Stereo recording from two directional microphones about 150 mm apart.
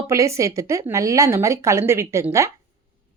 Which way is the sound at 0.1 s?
20° right (ahead or behind).